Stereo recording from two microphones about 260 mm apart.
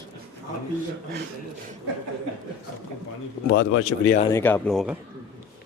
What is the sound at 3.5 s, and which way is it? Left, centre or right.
Speech, left.